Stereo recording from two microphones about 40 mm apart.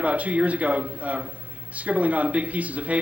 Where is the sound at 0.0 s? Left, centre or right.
Right.